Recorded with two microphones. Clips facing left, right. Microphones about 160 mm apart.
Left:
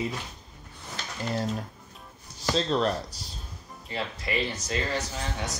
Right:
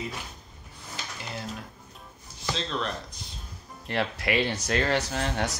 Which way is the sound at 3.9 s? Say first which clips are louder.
Right 5 dB; 70° right (ahead or behind).